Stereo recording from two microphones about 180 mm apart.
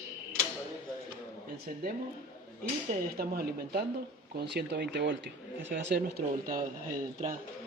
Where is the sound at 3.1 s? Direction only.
55° right (ahead or behind).